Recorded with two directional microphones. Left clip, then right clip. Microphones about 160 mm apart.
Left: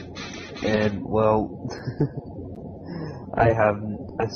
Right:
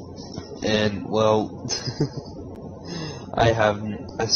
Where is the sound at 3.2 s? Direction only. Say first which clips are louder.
Even; 15° right (ahead or behind).